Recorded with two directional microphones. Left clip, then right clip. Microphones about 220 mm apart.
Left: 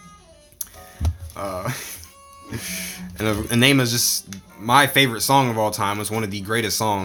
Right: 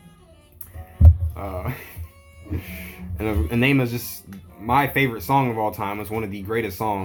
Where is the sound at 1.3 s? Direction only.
30° left (ahead or behind).